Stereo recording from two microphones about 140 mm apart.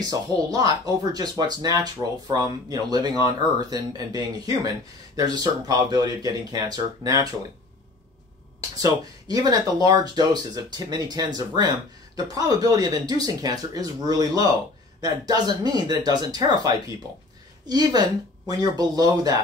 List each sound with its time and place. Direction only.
0.0 s speech: 30° right (ahead or behind)
8.8 s speech: 25° right (ahead or behind)